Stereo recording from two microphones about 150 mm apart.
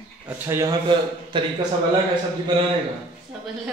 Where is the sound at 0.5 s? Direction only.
15° right (ahead or behind).